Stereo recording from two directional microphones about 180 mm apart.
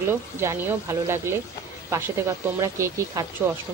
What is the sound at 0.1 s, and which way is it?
Speech, 10° right (ahead or behind).